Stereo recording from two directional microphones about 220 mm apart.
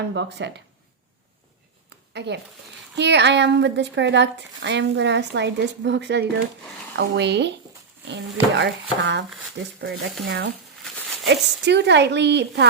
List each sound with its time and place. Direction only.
0.1 s speech: 50° right (ahead or behind)
2.1 s speech: 50° right (ahead or behind)
10.2 s speech: 50° right (ahead or behind)